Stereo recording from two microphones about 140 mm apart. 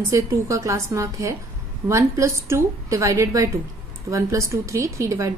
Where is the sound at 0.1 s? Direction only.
20° right (ahead or behind).